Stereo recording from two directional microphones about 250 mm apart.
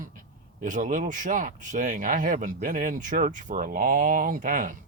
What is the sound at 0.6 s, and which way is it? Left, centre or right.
Speech, right.